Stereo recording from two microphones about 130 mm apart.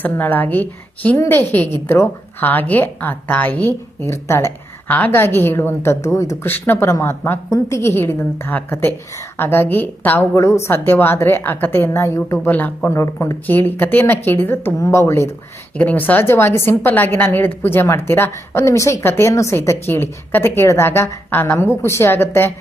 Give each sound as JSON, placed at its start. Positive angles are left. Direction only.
{"t": 0.0, "sound": "a woman's voice", "side_deg": 15}